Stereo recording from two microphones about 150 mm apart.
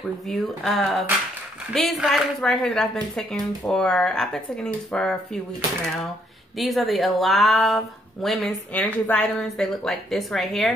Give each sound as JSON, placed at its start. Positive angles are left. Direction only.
{"t": 0.3, "sound": "speech", "side_deg": 0}
{"t": 6.6, "sound": "speech", "side_deg": 0}